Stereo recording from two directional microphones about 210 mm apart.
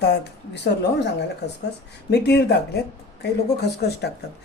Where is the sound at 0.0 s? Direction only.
55° left (ahead or behind).